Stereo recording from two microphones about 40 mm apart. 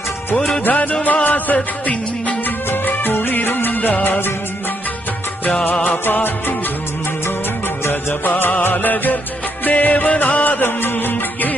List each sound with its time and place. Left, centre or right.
0.7 s music: left
2.6 s music: left
4.0 s music of bollywood: left
5.8 s music: left
8.2 s music: left
8.8 s music: left
10.6 s music of bollywood: left
11.0 s music: left